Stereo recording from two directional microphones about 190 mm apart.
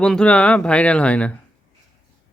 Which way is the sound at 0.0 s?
5° left (ahead or behind).